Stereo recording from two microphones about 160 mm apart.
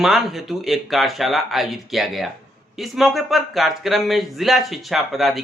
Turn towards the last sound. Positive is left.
turn(degrees=0)  # may be behind; listen again after turning